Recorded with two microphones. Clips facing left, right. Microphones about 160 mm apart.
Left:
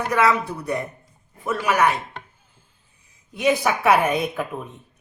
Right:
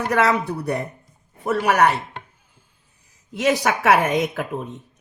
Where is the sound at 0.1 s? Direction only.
65° right (ahead or behind).